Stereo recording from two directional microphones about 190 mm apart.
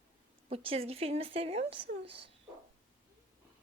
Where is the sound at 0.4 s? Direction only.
30° right (ahead or behind).